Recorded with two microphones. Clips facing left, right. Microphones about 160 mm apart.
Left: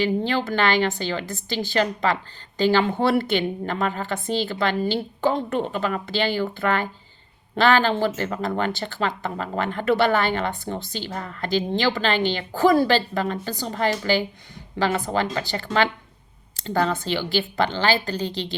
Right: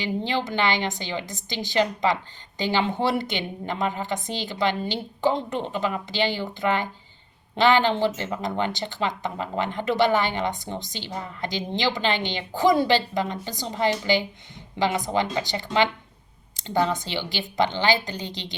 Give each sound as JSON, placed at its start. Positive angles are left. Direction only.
{"t": 0.3, "sound": "speech", "side_deg": -20}